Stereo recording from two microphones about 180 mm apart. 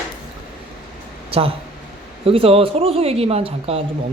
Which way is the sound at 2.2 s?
30° right (ahead or behind).